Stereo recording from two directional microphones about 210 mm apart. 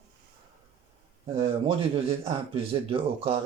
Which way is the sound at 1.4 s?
25° right (ahead or behind).